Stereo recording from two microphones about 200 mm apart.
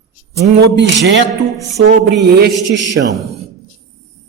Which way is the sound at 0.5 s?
60° right (ahead or behind).